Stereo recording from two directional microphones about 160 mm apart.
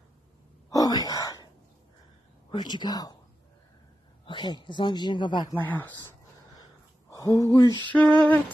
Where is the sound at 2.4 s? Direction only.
25° left (ahead or behind).